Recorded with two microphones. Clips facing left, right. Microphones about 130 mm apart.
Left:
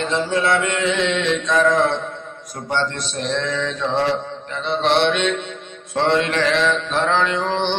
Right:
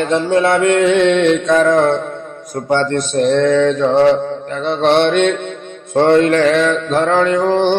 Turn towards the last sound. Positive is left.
turn(degrees=-45)  # may be behind; listen again after turning